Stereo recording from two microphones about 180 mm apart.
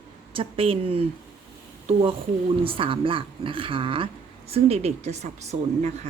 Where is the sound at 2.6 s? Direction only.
30° right (ahead or behind).